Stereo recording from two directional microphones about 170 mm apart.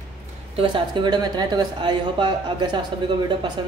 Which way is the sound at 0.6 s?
30° right (ahead or behind).